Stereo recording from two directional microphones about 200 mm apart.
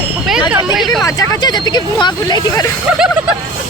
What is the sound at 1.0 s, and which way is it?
Speech, 20° left (ahead or behind).